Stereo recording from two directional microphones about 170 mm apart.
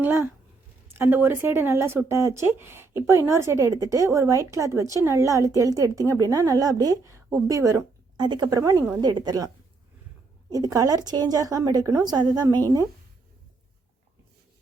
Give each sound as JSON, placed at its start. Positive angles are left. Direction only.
{"t": 0.0, "sound": "speech", "side_deg": -10}
{"t": 10.5, "sound": "speech", "side_deg": -20}